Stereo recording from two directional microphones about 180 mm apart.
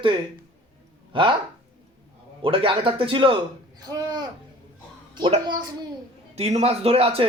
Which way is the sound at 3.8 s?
20° right (ahead or behind).